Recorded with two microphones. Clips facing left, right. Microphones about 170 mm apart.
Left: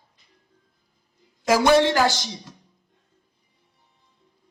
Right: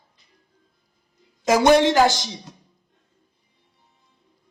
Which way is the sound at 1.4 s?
20° right (ahead or behind).